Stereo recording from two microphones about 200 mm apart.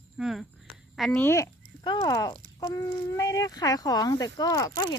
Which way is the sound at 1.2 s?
15° left (ahead or behind).